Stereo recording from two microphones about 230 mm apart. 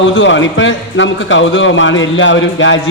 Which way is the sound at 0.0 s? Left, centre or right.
Left.